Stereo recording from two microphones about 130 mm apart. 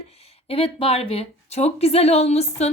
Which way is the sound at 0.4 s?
50° left (ahead or behind).